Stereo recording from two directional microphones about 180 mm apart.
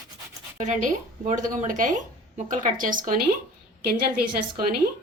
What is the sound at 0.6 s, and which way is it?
Speech, 45° right (ahead or behind).